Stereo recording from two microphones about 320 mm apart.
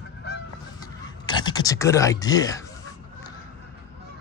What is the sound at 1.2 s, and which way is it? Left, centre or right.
Speech, centre.